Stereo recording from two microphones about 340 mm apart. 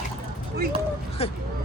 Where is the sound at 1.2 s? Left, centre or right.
Centre.